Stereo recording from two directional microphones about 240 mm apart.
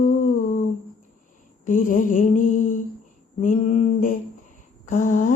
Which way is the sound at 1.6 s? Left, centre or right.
Left.